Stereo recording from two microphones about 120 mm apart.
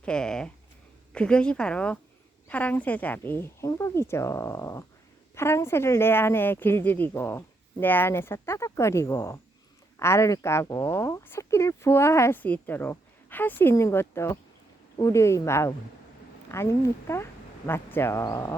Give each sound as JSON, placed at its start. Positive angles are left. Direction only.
{"t": 0.0, "sound": "speech", "side_deg": 5}